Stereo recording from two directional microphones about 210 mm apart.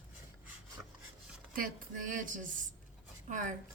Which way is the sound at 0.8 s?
Centre (ahead or behind).